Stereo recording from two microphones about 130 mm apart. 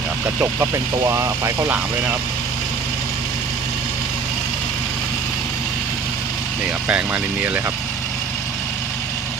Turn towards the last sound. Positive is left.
turn(degrees=-15)  # may be behind; listen again after turning